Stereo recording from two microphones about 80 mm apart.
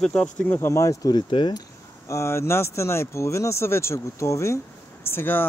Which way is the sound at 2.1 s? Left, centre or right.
Left.